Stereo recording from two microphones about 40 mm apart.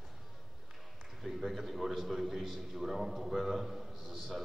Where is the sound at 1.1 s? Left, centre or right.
Centre.